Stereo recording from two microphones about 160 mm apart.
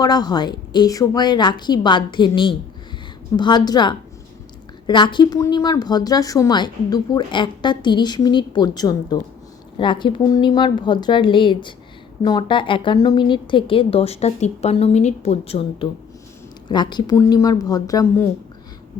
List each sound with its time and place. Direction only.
0.0 s a woman's voice: 25° left (ahead or behind)
16.6 s a woman's voice: 25° left (ahead or behind)